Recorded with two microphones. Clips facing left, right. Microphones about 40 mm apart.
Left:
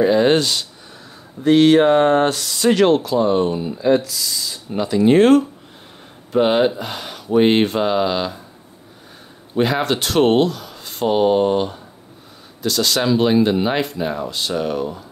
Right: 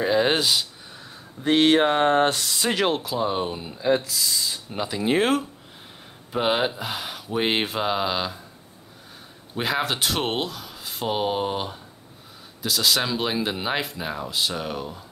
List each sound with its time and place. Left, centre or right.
0.0 s speech: centre
1.4 s speech: centre
9.6 s speech: centre